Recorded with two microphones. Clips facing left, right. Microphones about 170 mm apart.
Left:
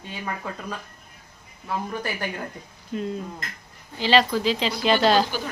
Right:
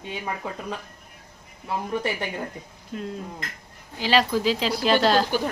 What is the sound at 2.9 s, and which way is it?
Speech, centre (ahead or behind).